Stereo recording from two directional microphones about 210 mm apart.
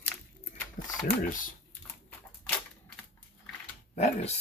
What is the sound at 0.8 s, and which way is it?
Mechanisms, 40° left (ahead or behind).